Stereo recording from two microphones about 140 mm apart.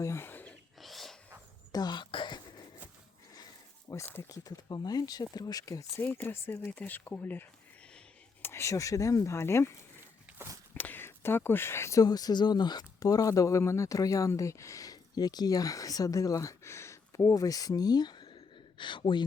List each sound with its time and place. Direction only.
0.0 s wild animals: 20° left (ahead or behind)
0.8 s wild animals: centre (ahead or behind)
1.7 s a sound: 30° left (ahead or behind)
3.8 s speech: 15° left (ahead or behind)
4.3 s speech: 25° left (ahead or behind)
6.0 s speech: 10° left (ahead or behind)
10.3 s walk: 20° right (ahead or behind)
10.8 s speech: 15° left (ahead or behind); by 19.2 s 35° left (ahead or behind)